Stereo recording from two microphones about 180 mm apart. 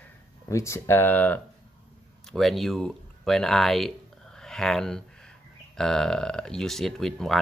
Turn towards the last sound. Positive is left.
turn(degrees=0)  # may be behind; listen again after turning